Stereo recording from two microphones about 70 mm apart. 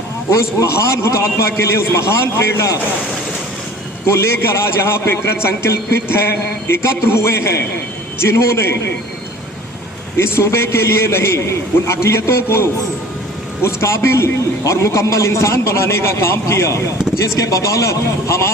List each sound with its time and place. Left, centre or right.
0.3 s a man's voice: left
4.0 s a man's voice: left
10.2 s a man's voice: left
17.3 s a man's voice: left